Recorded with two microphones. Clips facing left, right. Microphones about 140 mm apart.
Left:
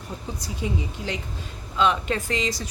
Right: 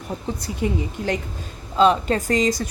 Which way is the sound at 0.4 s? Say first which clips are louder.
Right 4 dB; 55° right (ahead or behind).